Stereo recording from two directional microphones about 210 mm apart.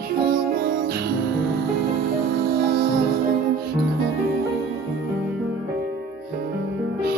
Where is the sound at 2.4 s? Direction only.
50° right (ahead or behind).